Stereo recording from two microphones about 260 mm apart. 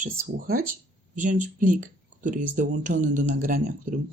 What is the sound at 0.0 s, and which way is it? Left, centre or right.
Speech, right.